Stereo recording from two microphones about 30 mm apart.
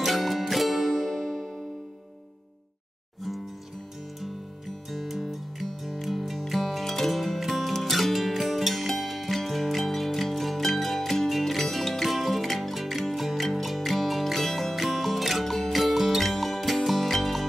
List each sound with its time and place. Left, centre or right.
0.0 s music: centre
4.2 s music: centre